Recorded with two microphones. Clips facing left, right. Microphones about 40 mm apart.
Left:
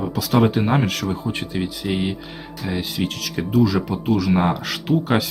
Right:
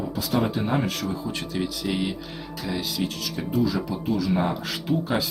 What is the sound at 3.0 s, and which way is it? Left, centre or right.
Speech, left.